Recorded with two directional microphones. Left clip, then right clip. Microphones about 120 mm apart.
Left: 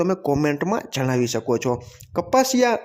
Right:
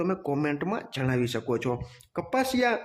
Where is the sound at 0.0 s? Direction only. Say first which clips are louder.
Left 7 dB; 45° left (ahead or behind).